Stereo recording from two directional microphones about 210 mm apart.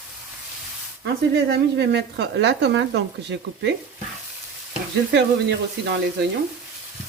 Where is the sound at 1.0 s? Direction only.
55° right (ahead or behind).